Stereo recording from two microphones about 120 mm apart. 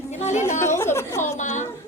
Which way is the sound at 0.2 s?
80° left.